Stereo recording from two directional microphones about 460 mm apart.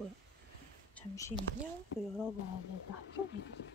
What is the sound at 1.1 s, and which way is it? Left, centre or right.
Speech, centre.